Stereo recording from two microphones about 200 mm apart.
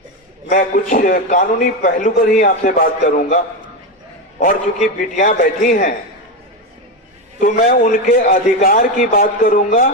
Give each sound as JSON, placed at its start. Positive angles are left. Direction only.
{"t": 0.5, "sound": "a man's voice", "side_deg": 40}
{"t": 7.3, "sound": "a man's voice", "side_deg": 45}